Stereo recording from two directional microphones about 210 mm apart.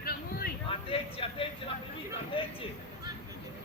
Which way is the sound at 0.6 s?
25° left (ahead or behind).